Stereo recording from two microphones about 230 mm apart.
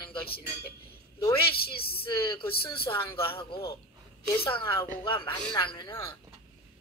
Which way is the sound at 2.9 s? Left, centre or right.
Left.